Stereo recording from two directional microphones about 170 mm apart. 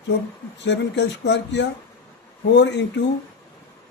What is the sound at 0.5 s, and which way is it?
Speech, 90° left.